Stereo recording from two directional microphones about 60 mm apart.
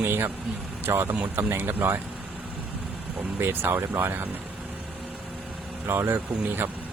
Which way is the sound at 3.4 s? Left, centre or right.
Right.